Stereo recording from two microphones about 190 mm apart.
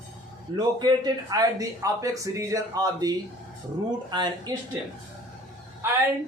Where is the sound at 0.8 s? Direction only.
20° right (ahead or behind).